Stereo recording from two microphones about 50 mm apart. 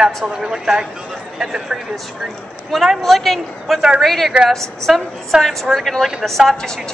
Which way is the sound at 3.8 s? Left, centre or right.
Centre.